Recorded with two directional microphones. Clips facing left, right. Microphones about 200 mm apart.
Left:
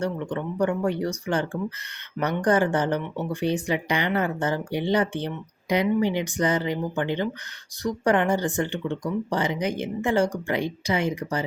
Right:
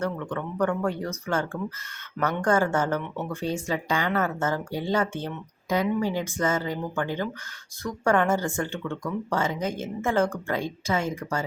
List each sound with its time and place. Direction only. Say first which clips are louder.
0.0 s speech: left 2 dB; 15° left (ahead or behind)